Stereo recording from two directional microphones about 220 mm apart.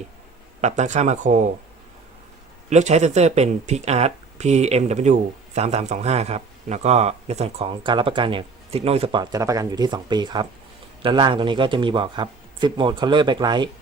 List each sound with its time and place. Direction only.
0.6 s speech: 30° right (ahead or behind)
2.6 s speech: 30° right (ahead or behind)